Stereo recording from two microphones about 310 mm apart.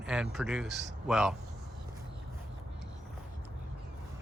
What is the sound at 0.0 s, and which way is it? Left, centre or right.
Speech, centre.